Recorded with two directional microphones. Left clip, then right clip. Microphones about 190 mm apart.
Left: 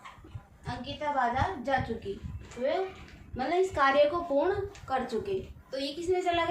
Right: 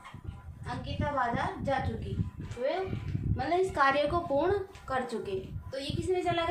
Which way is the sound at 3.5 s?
20° right (ahead or behind).